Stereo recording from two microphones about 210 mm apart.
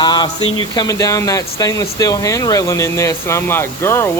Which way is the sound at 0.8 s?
15° left (ahead or behind).